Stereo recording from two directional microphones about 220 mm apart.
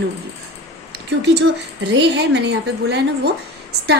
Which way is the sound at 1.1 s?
50° right (ahead or behind).